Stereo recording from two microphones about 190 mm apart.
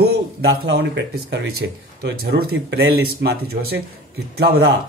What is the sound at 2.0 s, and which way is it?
A man's voice, 60° right (ahead or behind).